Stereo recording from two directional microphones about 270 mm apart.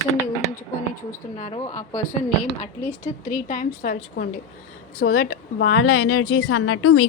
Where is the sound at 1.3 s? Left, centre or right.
Left.